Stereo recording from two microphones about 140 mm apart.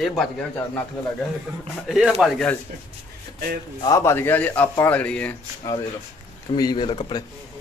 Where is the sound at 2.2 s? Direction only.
5° left (ahead or behind).